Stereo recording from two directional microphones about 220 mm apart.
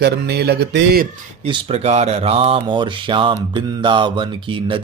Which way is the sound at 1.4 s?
25° right (ahead or behind).